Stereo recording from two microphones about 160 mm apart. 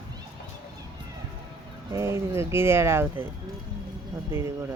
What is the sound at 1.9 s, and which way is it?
Speech, 15° right (ahead or behind).